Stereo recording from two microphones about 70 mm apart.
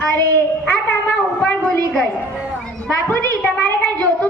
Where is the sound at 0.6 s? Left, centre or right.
Left.